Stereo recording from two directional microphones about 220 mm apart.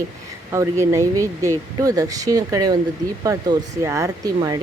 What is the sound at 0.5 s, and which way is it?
Speech, 10° right (ahead or behind).